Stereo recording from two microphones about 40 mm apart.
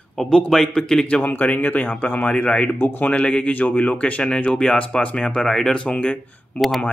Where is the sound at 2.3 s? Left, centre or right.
Left.